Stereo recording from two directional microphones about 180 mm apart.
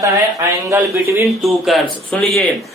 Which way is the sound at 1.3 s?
Centre (ahead or behind).